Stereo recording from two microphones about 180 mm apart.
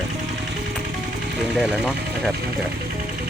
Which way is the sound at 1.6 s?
Centre (ahead or behind).